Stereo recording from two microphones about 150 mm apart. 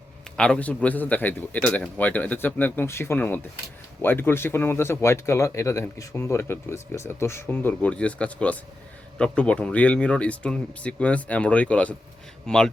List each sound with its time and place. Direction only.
0.3 s speech: 5° left (ahead or behind)